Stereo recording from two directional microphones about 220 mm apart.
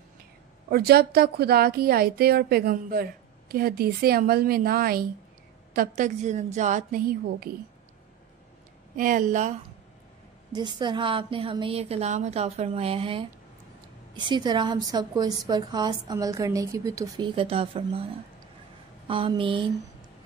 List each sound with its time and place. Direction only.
0.7 s a woman's voice: 45° right (ahead or behind)
8.9 s a woman's voice: 40° right (ahead or behind)
10.5 s a woman's voice: 20° right (ahead or behind)
19.0 s a woman's voice: 25° right (ahead or behind)